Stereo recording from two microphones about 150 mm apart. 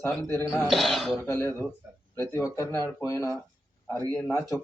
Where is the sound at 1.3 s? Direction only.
15° left (ahead or behind).